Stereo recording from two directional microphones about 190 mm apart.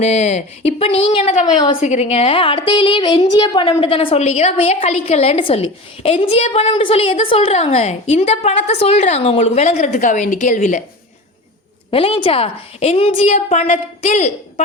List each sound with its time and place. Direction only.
0.0 s a woman's voice: 35° left (ahead or behind)
11.9 s a woman's voice: 30° left (ahead or behind)